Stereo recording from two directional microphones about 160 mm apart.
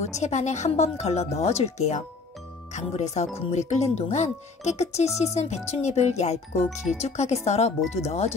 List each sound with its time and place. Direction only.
0.0 s speech: 45° left (ahead or behind)